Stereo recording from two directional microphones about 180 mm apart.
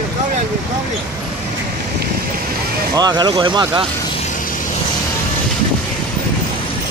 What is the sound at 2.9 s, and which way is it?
Speech, 20° right (ahead or behind).